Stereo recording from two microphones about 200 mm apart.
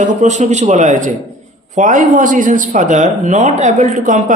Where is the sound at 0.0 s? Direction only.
35° right (ahead or behind).